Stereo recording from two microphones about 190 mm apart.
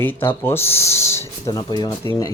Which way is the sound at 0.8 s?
35° left (ahead or behind).